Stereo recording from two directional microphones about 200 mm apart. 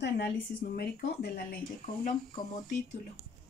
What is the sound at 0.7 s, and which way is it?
Speech, 50° left (ahead or behind).